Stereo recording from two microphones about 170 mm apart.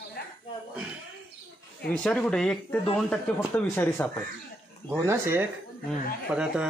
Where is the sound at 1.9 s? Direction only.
5° left (ahead or behind).